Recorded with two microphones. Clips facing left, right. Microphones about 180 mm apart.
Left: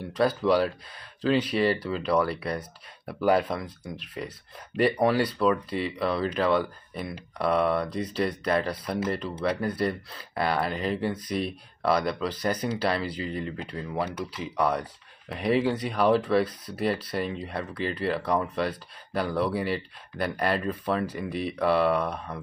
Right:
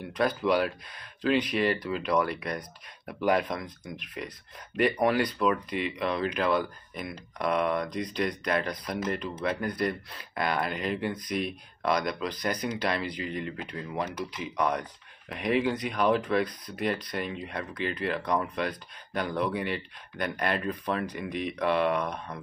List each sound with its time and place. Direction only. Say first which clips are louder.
0.1 s speech: left 3 dB; 35° left (ahead or behind)